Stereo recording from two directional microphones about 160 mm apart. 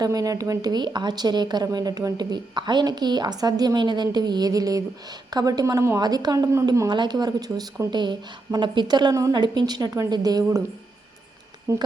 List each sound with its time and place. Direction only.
0.0 s speech: 20° right (ahead or behind)
11.7 s a woman's voice: 20° right (ahead or behind)